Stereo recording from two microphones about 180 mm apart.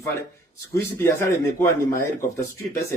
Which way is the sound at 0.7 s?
15° left (ahead or behind).